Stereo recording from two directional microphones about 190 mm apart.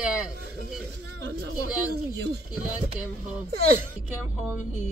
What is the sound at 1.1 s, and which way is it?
Speech, 60° right (ahead or behind).